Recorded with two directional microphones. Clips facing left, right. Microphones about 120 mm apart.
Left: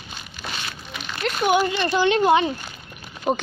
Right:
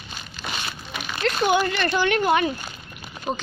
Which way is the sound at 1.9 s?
20° left (ahead or behind).